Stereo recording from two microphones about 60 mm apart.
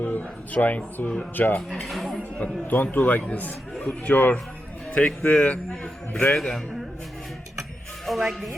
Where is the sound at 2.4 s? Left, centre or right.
Left.